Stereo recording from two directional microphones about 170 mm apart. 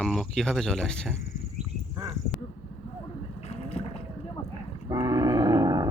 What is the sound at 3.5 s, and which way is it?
Boat, 35° left (ahead or behind).